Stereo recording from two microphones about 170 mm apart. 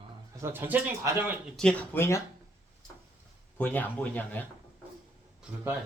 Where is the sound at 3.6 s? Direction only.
10° left (ahead or behind).